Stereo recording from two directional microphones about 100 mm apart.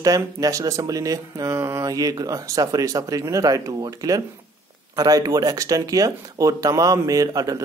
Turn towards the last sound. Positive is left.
turn(degrees=-35)  # may be behind; listen again after turning